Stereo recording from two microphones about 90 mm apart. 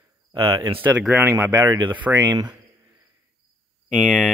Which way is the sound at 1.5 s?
45° right (ahead or behind).